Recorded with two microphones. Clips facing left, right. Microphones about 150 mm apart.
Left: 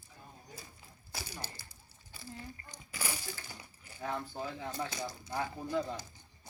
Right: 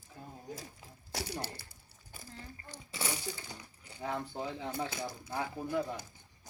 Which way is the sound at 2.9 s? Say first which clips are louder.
Right 3 dB; 25° right (ahead or behind).